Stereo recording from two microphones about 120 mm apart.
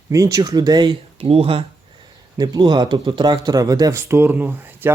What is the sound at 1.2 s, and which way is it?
Speech, 55° right (ahead or behind).